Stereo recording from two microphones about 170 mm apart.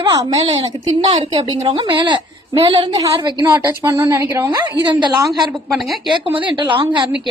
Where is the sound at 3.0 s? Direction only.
20° right (ahead or behind).